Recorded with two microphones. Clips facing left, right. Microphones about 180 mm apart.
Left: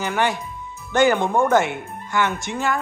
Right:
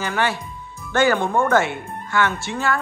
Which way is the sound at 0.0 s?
15° left (ahead or behind).